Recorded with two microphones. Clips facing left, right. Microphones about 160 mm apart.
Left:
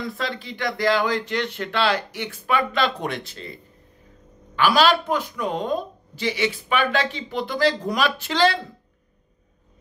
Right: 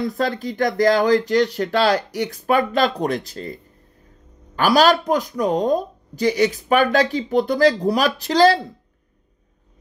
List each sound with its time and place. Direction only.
0.0 s speech: 40° right (ahead or behind)
4.6 s speech: 40° right (ahead or behind)